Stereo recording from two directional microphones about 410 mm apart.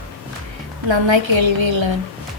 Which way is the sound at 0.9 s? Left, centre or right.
Right.